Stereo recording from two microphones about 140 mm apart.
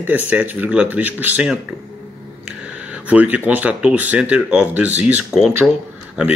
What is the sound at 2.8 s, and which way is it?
Speech, 10° right (ahead or behind).